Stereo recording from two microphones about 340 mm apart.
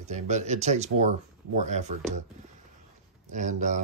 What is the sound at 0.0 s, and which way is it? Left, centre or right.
Speech, centre.